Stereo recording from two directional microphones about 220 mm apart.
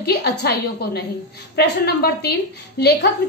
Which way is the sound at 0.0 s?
45° left (ahead or behind).